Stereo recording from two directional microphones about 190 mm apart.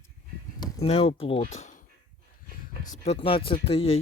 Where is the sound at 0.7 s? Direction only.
30° left (ahead or behind).